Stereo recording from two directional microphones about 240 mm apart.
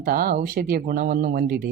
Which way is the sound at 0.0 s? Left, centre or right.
Right.